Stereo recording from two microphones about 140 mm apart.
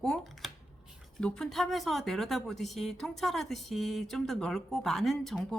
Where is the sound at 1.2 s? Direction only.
5° left (ahead or behind).